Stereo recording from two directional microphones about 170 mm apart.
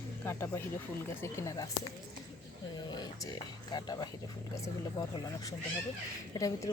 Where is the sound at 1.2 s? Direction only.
20° left (ahead or behind).